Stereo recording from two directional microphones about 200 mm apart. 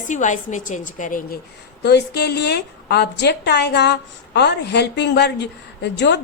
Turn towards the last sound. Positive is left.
turn(degrees=60)  # may be behind; listen again after turning